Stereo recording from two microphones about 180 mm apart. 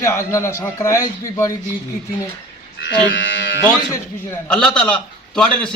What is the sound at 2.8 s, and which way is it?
Speech, 85° left.